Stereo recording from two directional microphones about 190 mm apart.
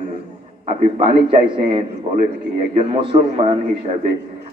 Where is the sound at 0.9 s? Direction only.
30° right (ahead or behind).